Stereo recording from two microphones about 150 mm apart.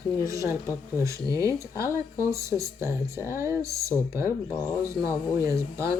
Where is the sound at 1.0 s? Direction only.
20° right (ahead or behind).